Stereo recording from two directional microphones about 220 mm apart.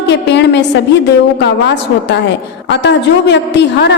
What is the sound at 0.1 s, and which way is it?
Speech, 50° left (ahead or behind).